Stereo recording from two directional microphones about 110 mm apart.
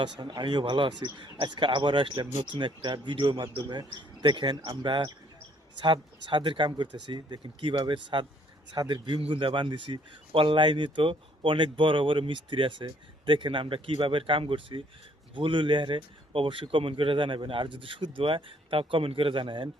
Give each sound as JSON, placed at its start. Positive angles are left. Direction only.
{"t": 0.0, "sound": "a man's voice", "side_deg": -45}